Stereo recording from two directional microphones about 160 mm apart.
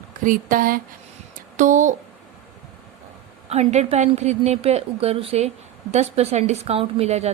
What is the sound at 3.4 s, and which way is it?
A woman's voice, 45° right (ahead or behind).